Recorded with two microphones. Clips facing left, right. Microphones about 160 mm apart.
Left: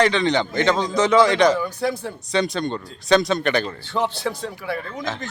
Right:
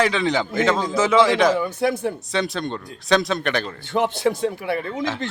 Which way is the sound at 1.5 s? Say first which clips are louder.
Right 2 dB; 20° right (ahead or behind).